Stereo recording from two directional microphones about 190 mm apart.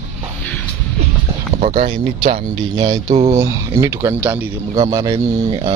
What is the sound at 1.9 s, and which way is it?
Speech, 30° right (ahead or behind).